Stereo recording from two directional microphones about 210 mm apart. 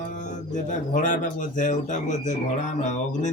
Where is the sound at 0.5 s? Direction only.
35° left (ahead or behind).